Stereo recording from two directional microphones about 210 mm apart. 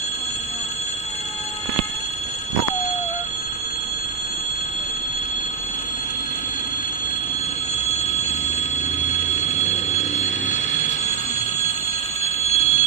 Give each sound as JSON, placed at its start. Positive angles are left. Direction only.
{"t": 12.4, "sound": "bicycle bell", "side_deg": 30}